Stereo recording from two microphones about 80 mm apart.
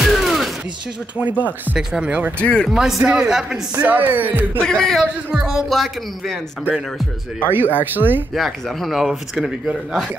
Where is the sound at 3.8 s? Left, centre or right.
Right.